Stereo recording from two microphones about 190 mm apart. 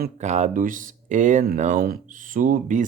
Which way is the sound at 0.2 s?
40° right (ahead or behind).